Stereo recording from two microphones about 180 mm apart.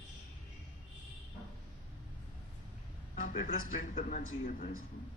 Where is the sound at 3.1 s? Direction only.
45° left (ahead or behind).